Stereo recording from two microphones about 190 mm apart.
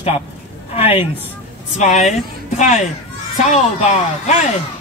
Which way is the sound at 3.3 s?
40° left (ahead or behind).